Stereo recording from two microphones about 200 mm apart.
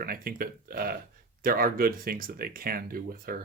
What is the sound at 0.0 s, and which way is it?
Speech, 45° right (ahead or behind).